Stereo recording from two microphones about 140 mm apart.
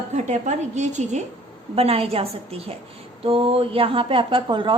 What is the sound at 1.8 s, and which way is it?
A woman's voice, 45° right (ahead or behind).